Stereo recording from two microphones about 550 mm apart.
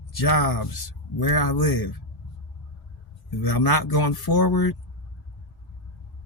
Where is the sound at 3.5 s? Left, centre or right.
Left.